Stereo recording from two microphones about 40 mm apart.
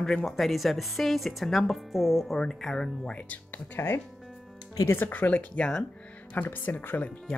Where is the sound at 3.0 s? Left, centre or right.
Left.